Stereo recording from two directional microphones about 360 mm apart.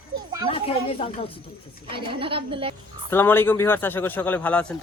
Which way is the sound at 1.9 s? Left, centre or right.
Centre.